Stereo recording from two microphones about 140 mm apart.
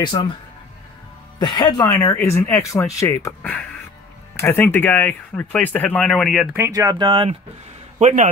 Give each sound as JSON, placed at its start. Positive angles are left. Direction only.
{"t": 0.2, "sound": "speech", "side_deg": 35}
{"t": 1.4, "sound": "speech", "side_deg": 30}
{"t": 4.4, "sound": "speech", "side_deg": 15}
{"t": 6.5, "sound": "speech", "side_deg": -20}
{"t": 8.0, "sound": "a man's voice", "side_deg": -60}